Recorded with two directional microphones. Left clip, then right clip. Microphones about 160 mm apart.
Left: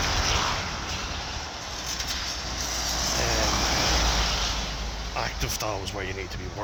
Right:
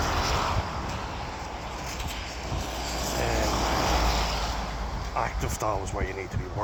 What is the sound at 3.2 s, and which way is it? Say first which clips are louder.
Vehicle: even; 35° left (ahead or behind).